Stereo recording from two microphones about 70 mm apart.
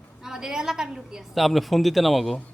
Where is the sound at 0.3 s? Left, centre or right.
Centre.